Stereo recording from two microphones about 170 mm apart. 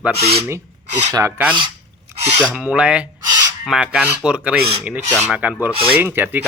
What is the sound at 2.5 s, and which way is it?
Speech, 5° right (ahead or behind).